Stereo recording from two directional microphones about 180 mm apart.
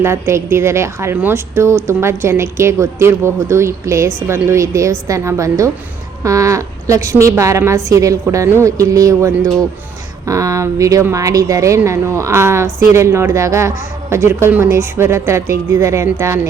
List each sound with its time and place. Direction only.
0.0 s a woman's voice: 15° right (ahead or behind)